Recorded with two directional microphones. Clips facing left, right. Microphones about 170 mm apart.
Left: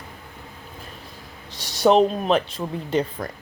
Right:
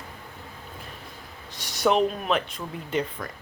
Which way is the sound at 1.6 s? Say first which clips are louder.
Left 5 dB; 30° left (ahead or behind).